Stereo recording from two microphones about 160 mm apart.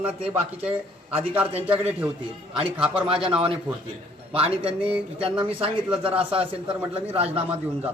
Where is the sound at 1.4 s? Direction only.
10° right (ahead or behind).